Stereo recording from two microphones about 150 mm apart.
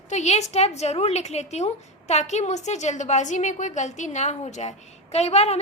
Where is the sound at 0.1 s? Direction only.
50° left (ahead or behind).